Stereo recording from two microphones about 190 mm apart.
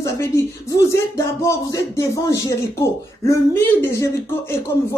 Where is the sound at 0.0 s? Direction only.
15° left (ahead or behind).